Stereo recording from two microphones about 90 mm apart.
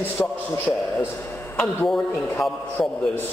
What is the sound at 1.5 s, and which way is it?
A woman's voice, 5° left (ahead or behind).